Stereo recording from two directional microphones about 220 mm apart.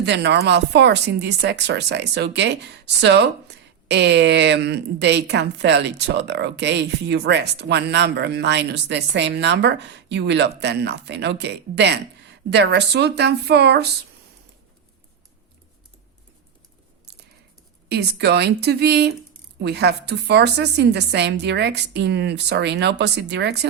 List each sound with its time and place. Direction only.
0.0 s speech: 50° right (ahead or behind)
17.8 s speech: 50° right (ahead or behind)